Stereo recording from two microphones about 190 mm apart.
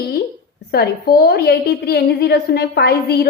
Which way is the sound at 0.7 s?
55° left (ahead or behind).